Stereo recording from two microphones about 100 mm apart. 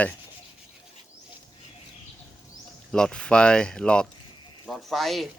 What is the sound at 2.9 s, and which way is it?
Speech, 10° left (ahead or behind).